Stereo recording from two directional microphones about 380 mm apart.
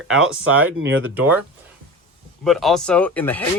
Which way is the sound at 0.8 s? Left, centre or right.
Right.